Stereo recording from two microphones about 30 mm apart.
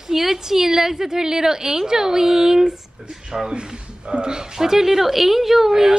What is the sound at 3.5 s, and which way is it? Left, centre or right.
A woman's voice, right.